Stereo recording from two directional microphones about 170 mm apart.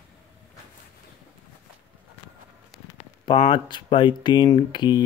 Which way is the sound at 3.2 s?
30° left (ahead or behind).